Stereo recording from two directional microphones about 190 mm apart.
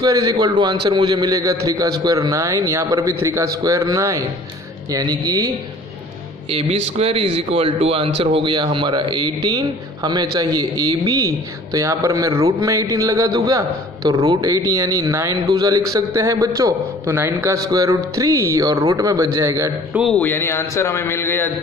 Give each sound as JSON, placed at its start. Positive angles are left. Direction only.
{"t": 0.0, "sound": "a man's voice", "side_deg": -20}
{"t": 7.0, "sound": "a man's voice", "side_deg": -30}
{"t": 20.0, "sound": "a man's voice", "side_deg": 5}